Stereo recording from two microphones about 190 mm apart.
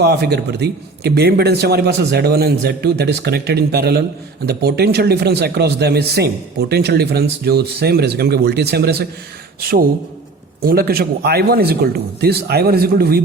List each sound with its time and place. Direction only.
0.0 s a man's voice: 60° right (ahead or behind)